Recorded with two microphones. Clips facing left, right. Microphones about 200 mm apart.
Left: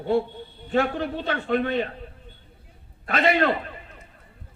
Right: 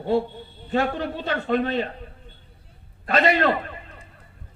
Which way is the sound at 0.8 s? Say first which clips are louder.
Even; 55° left (ahead or behind).